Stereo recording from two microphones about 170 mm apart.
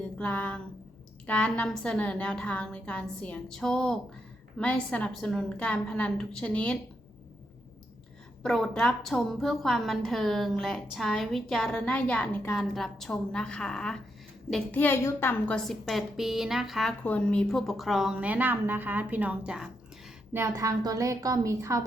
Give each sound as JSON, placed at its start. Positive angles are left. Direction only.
{"t": 0.2, "sound": "a woman's voice", "side_deg": 10}
{"t": 8.4, "sound": "a woman's voice", "side_deg": 5}
{"t": 20.3, "sound": "a woman's voice", "side_deg": -15}